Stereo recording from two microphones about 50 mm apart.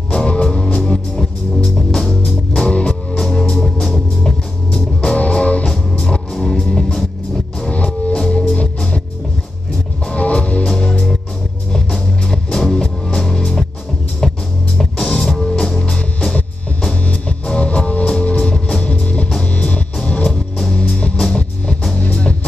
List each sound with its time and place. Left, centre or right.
0.1 s music: centre
2.7 s music: left
3.2 s music: centre
5.1 s music: left
5.7 s music: centre
10.1 s music: left
10.8 s music: centre
15.5 s music: centre
17.1 s music: left
19.4 s music: left